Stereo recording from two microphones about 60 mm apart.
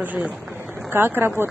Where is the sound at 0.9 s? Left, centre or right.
Right.